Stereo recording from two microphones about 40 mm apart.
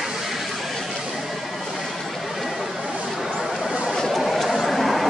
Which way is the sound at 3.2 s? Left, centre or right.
Centre.